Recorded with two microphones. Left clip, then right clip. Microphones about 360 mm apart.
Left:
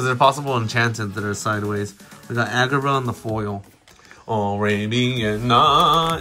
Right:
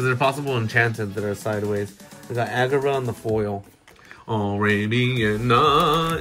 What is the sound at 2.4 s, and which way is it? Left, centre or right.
Speech, right.